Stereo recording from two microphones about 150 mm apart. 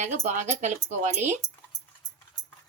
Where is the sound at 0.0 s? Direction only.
50° right (ahead or behind).